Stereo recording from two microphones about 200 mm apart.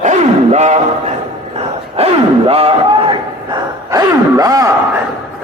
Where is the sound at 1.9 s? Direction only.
30° right (ahead or behind).